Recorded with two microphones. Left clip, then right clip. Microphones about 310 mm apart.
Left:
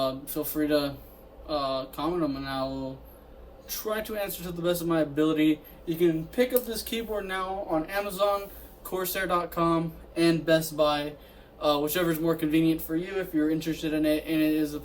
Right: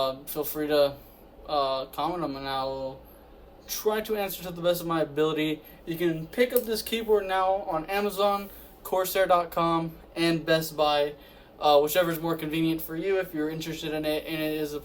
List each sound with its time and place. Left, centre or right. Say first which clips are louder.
0.0 s speech: right 1 dB; right
3.7 s speech: right 4 dB; centre